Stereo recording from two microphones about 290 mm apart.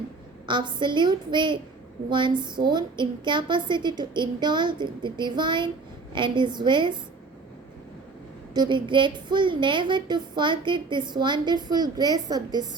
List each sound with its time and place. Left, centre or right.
0.4 s speech: centre
8.5 s speech: centre